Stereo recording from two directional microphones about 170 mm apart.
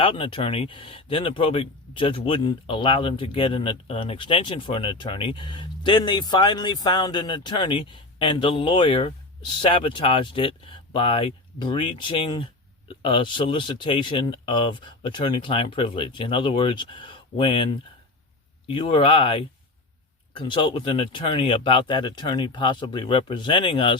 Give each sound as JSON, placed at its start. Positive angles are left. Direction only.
{"t": 0.0, "sound": "speech", "side_deg": 30}